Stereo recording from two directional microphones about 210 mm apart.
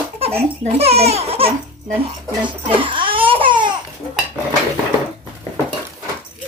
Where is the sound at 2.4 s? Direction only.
25° right (ahead or behind).